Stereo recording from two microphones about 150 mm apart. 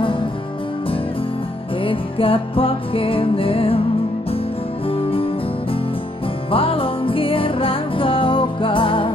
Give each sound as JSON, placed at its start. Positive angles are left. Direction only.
{"t": 0.0, "sound": "music", "side_deg": 35}
{"t": 1.8, "sound": "music", "side_deg": 35}
{"t": 4.8, "sound": "music", "side_deg": 40}